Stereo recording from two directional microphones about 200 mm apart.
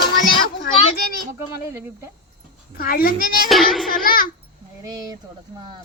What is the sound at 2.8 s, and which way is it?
Speech, 45° left (ahead or behind).